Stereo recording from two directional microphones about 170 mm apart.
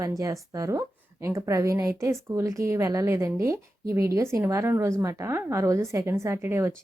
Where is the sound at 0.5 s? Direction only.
20° right (ahead or behind).